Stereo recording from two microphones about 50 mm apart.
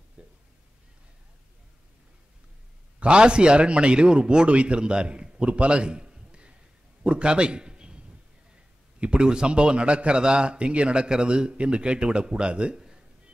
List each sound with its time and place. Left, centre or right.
0.2 s a sound: centre
3.0 s a man's voice: right
9.0 s a man's voice: centre